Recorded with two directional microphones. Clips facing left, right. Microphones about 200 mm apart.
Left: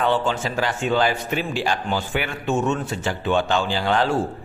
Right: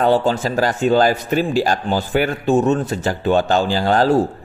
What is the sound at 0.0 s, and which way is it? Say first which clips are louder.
A man's voice: right 6 dB; 40° right (ahead or behind).